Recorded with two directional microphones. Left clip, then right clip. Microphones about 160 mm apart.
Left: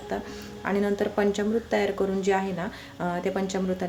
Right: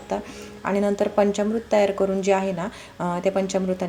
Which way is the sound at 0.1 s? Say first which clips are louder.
Right 5 dB; 15° right (ahead or behind).